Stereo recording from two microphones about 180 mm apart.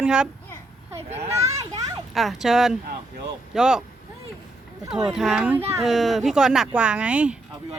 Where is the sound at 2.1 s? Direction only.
Centre (ahead or behind).